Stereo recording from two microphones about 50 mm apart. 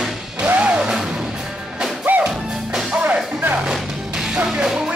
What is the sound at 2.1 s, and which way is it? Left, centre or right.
Music, right.